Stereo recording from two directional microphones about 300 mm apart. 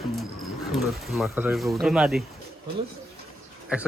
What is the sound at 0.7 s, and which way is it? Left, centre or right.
Speech, centre.